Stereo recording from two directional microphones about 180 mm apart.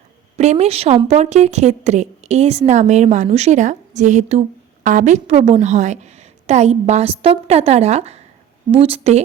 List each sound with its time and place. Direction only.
0.3 s a woman's voice: 35° right (ahead or behind)